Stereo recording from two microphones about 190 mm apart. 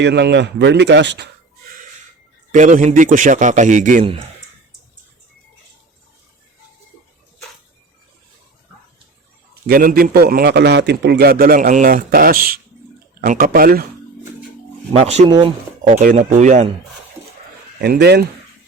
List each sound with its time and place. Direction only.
0.0 s a man's voice: 65° right (ahead or behind)
2.5 s a man's voice: 40° right (ahead or behind)
9.6 s a man's voice: 50° right (ahead or behind)
14.9 s a man's voice: 35° right (ahead or behind)
15.3 s speech: 25° right (ahead or behind)
15.9 s a man's voice: 45° right (ahead or behind)
17.7 s a man's voice: 60° right (ahead or behind)